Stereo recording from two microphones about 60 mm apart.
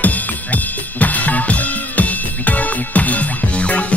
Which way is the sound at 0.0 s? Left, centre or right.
Left.